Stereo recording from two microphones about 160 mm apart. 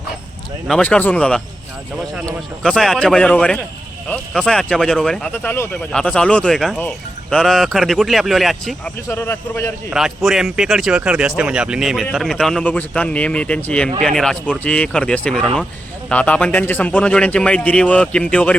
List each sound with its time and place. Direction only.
0.7 s a man's voice: 10° left (ahead or behind)
2.6 s speech: centre (ahead or behind)
9.0 s a man's voice: 15° left (ahead or behind)
9.9 s a man's voice: centre (ahead or behind)